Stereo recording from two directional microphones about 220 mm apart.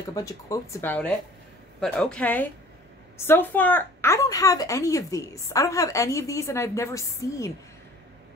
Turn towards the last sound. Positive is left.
turn(degrees=15)  # may be behind; listen again after turning